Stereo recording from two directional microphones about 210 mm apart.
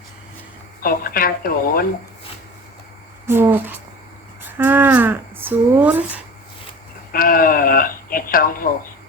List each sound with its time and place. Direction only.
0.8 s speech: 45° left (ahead or behind)
3.2 s speech: 10° right (ahead or behind)
7.1 s speech: 45° left (ahead or behind)